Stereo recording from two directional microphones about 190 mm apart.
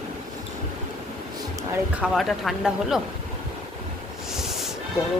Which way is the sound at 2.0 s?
Centre (ahead or behind).